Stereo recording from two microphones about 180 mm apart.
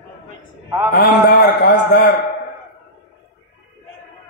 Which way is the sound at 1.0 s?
65° left (ahead or behind).